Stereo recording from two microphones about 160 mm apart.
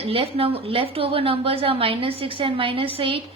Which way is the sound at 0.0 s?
35° right (ahead or behind).